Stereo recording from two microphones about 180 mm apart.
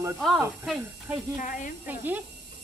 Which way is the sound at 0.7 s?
5° right (ahead or behind).